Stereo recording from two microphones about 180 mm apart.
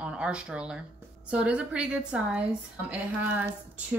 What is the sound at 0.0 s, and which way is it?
Speech, 5° right (ahead or behind).